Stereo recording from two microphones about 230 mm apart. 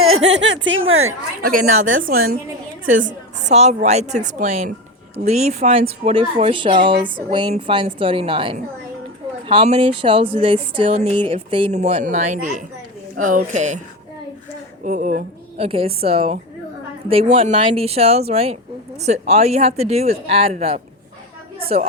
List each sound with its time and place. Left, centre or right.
0.0 s speech: right
1.5 s a woman's voice: right
14.8 s speech: right